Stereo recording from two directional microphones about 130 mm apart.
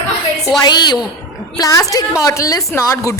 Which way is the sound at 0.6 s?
35° left (ahead or behind).